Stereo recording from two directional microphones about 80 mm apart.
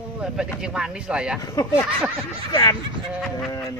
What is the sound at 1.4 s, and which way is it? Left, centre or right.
Speech, left.